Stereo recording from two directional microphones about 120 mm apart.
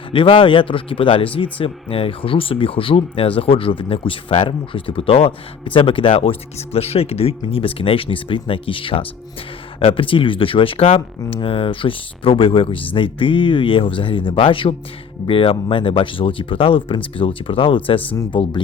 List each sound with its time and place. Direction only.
0.1 s speech: 45° left (ahead or behind)